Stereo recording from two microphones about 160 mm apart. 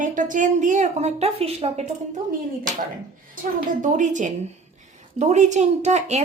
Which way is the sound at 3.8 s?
50° right (ahead or behind).